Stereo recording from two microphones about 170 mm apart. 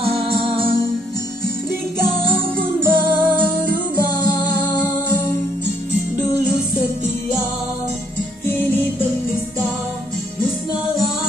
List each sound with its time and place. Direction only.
2.8 s music: 10° right (ahead or behind)
8.5 s music: 10° left (ahead or behind)